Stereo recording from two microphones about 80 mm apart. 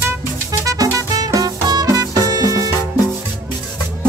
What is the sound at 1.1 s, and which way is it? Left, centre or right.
Music, right.